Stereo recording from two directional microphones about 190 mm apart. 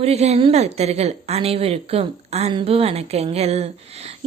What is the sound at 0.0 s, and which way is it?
A child's voice, 35° right (ahead or behind).